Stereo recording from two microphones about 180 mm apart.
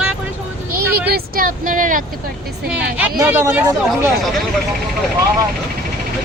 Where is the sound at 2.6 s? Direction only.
10° right (ahead or behind).